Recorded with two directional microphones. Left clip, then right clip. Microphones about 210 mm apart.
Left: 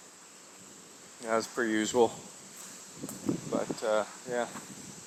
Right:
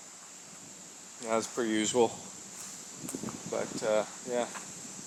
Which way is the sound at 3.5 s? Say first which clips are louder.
Right 1 dB; 10° left (ahead or behind).